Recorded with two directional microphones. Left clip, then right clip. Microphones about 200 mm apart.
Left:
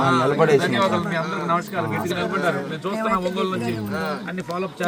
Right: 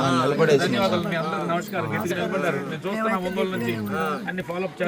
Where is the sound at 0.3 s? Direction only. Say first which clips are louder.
Left 2 dB; 45° left (ahead or behind).